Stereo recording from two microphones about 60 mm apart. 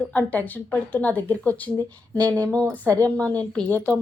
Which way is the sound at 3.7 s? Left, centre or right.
Left.